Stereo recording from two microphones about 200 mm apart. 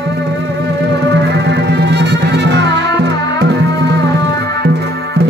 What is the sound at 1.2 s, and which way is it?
Music, 55° right (ahead or behind).